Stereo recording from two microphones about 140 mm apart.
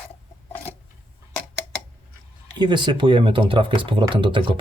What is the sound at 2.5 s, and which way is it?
Speech, 30° right (ahead or behind).